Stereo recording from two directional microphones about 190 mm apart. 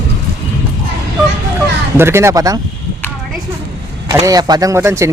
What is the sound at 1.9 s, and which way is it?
Speech, 15° right (ahead or behind).